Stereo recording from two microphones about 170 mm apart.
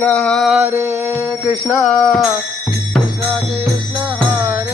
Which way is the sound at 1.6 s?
Centre (ahead or behind).